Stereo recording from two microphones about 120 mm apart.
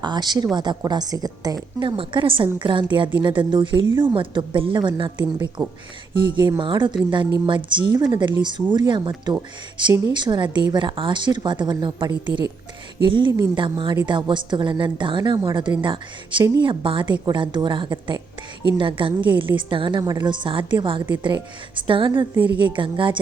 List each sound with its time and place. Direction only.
0.0 s a woman's voice: 35° right (ahead or behind)
5.2 s speech: 30° right (ahead or behind)
6.6 s a woman's voice: 45° right (ahead or behind)